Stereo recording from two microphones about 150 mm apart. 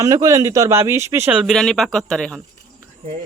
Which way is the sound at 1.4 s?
Centre (ahead or behind).